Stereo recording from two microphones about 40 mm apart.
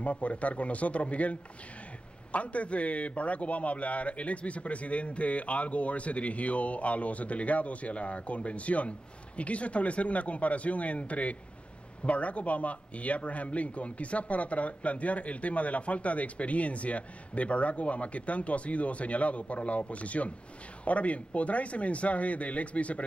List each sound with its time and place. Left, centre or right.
0.0 s speech: left